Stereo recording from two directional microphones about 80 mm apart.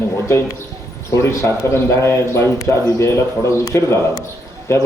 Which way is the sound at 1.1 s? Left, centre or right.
Left.